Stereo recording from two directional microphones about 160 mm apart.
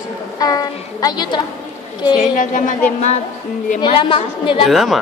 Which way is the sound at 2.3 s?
55° left (ahead or behind).